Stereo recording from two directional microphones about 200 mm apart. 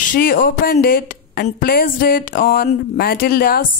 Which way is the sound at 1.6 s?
50° left (ahead or behind).